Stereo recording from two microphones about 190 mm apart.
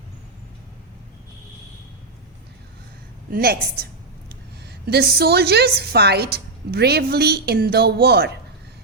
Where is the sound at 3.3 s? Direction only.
55° right (ahead or behind).